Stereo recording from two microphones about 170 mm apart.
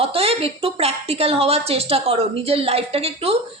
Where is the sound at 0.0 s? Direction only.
35° right (ahead or behind).